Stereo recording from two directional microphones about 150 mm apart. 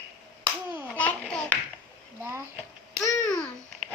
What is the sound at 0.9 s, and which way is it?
Babbling, 10° left (ahead or behind).